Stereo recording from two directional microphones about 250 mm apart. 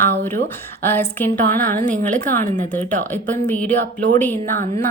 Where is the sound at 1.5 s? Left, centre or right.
Right.